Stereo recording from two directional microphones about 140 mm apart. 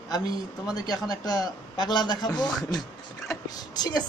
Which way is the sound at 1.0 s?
25° left (ahead or behind).